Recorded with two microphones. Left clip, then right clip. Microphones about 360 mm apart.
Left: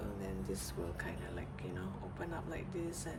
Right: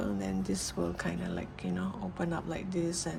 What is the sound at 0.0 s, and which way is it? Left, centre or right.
Speech, centre.